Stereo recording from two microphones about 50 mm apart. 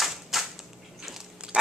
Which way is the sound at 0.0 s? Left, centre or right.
Centre.